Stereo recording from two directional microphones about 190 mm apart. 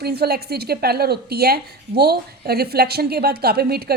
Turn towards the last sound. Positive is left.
turn(degrees=-55)  # may be behind; listen again after turning